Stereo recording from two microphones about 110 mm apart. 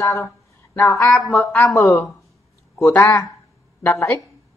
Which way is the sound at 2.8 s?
15° left (ahead or behind).